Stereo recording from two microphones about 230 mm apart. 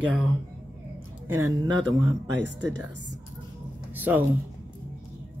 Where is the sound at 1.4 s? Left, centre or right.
Centre.